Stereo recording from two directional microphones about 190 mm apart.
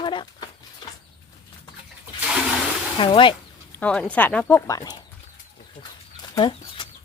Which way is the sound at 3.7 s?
5° left (ahead or behind).